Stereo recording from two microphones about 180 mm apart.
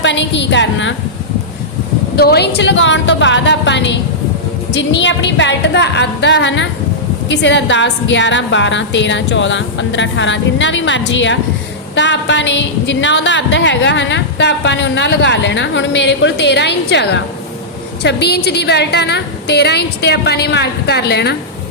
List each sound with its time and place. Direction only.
0.0 s a woman's voice: 85° left
2.1 s a woman's voice: 65° left (ahead or behind); by 4.0 s 80° left
4.7 s a woman's voice: 90° left; by 21.3 s 65° left (ahead or behind)